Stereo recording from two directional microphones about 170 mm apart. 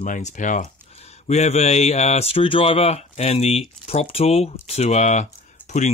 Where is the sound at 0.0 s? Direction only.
45° left (ahead or behind).